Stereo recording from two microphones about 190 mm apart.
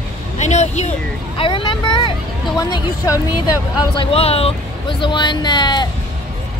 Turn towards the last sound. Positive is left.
turn(degrees=20)  # may be behind; listen again after turning